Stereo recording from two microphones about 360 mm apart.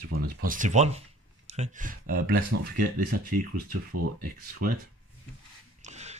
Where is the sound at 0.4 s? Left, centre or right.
Right.